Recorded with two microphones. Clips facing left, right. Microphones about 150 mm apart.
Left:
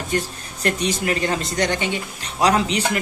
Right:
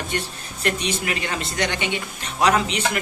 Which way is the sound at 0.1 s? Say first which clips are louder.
Left 4 dB; 40° left (ahead or behind).